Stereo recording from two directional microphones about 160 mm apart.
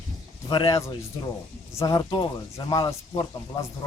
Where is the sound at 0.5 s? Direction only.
25° left (ahead or behind).